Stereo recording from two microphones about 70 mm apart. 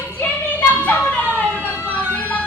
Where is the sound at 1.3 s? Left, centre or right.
Left.